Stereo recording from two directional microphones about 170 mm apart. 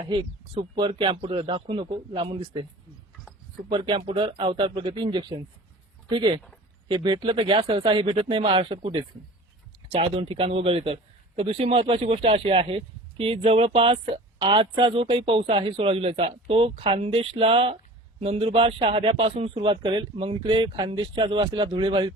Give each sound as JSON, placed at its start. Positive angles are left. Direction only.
{"t": 0.1, "sound": "speech", "side_deg": -30}
{"t": 3.7, "sound": "a man's voice", "side_deg": -25}